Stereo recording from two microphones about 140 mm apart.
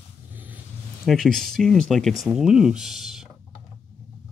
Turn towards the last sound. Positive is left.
turn(degrees=0)  # may be behind; listen again after turning